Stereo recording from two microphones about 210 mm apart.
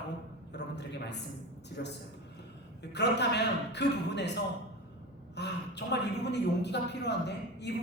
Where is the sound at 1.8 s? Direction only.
50° left (ahead or behind).